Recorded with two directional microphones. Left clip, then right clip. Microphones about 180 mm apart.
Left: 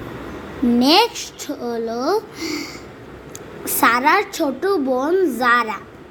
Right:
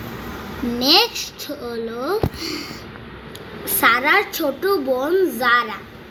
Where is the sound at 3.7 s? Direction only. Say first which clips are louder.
Left 1 dB; 50° left (ahead or behind).